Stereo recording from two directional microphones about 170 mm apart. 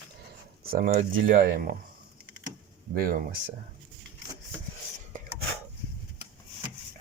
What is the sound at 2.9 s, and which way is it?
Speech, 60° right (ahead or behind).